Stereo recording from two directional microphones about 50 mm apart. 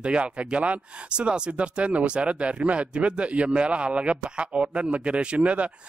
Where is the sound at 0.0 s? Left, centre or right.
Right.